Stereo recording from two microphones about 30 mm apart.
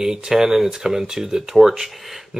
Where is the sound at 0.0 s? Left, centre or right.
Centre.